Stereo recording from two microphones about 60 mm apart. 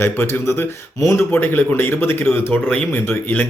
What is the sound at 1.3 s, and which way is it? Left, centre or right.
A man's voice, left.